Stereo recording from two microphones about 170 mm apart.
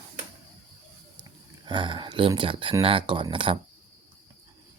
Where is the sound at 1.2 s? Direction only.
25° right (ahead or behind).